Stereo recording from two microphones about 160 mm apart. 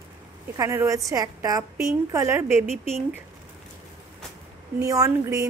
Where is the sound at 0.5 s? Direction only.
20° right (ahead or behind).